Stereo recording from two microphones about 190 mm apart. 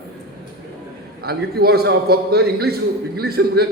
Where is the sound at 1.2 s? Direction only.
55° right (ahead or behind).